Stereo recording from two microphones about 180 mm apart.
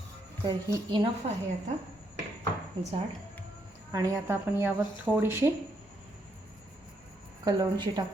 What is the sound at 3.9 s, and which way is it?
A woman's voice, 20° right (ahead or behind).